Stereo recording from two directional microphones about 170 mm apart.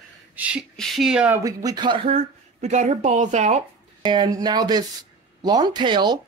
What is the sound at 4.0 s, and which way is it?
Speech, 25° right (ahead or behind).